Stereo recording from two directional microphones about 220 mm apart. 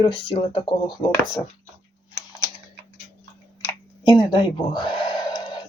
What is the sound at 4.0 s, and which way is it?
Speech, 20° left (ahead or behind).